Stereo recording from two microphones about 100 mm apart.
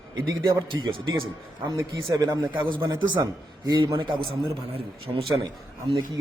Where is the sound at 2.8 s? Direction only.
50° right (ahead or behind).